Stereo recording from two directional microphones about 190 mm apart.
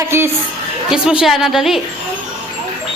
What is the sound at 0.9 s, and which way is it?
Speech, 5° right (ahead or behind).